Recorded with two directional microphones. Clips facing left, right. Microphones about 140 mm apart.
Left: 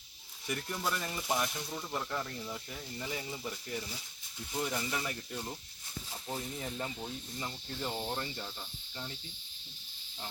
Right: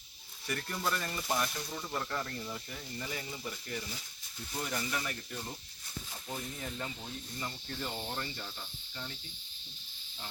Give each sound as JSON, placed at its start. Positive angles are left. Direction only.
{"t": 0.4, "sound": "speech", "side_deg": 10}
{"t": 3.1, "sound": "speech", "side_deg": 20}
{"t": 6.7, "sound": "speech", "side_deg": 20}